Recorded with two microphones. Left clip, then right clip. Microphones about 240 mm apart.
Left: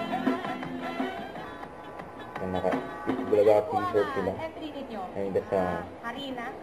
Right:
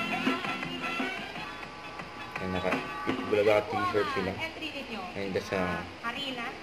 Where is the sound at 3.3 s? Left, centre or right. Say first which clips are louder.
Left 4 dB; right.